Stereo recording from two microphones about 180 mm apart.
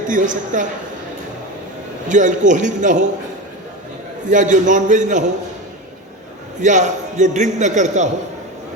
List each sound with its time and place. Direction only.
0.1 s a man's voice: 45° right (ahead or behind)
2.0 s a man's voice: 45° right (ahead or behind)
4.3 s a man's voice: 45° right (ahead or behind)
6.6 s a man's voice: 45° right (ahead or behind)